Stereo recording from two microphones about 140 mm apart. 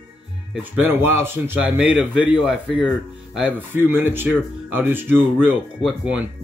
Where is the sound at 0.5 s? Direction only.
10° right (ahead or behind).